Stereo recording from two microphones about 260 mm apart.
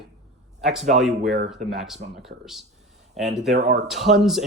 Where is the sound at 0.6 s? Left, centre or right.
Centre.